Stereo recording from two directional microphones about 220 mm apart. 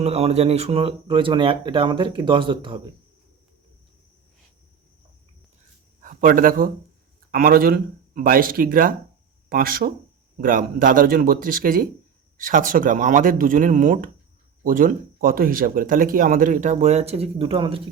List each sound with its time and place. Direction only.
0.0 s speech: 30° right (ahead or behind)
6.0 s a man's voice: 35° right (ahead or behind)